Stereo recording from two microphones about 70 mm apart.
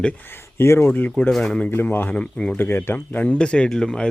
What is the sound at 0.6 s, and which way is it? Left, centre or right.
Speech, left.